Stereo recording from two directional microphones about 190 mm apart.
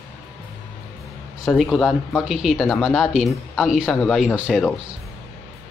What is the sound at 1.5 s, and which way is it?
Speech, centre (ahead or behind).